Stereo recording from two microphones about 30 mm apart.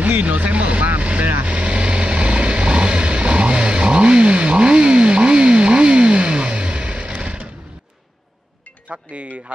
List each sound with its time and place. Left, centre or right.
0.0 s speech: right
1.4 s vehicle: right
8.9 s speech: right